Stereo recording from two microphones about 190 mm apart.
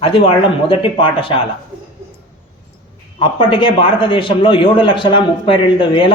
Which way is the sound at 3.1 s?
25° left (ahead or behind).